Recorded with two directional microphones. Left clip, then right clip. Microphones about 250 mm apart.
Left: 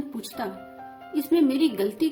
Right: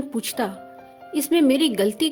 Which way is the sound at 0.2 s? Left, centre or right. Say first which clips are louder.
Right 9 dB; right.